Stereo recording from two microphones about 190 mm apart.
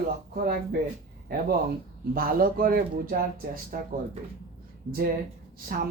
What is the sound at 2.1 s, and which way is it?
Speech, 50° right (ahead or behind).